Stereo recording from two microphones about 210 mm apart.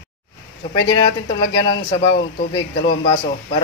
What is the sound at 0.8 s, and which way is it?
Speech, 25° left (ahead or behind).